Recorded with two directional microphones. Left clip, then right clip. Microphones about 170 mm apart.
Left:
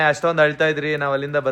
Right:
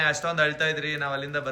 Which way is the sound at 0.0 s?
30° left (ahead or behind).